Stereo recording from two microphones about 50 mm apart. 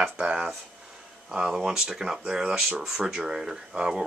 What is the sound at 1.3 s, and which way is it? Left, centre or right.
Speech, centre.